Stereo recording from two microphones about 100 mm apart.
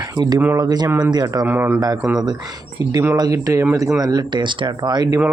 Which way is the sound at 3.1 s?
40° right (ahead or behind).